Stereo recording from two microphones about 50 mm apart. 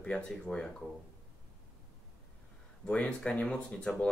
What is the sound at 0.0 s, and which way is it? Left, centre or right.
Speech, centre.